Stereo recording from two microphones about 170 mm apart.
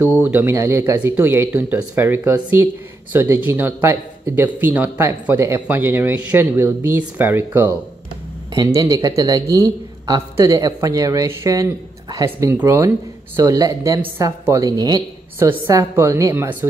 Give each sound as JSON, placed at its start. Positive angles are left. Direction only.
{"t": 0.2, "sound": "a man's voice", "side_deg": -10}